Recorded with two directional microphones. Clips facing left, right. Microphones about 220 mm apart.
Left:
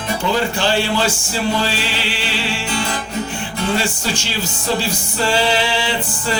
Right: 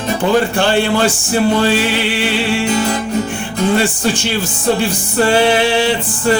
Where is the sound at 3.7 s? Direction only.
55° right (ahead or behind).